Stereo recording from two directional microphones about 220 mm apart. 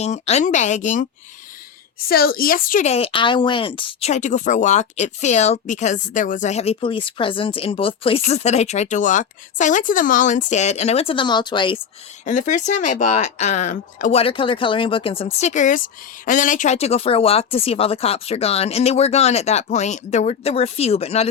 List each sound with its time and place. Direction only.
0.0 s speech: 30° left (ahead or behind)
2.0 s speech: 45° left (ahead or behind); by 11.8 s 20° left (ahead or behind)
12.2 s speech: 35° left (ahead or behind)